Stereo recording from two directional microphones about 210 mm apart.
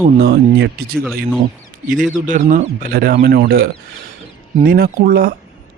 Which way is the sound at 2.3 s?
35° right (ahead or behind).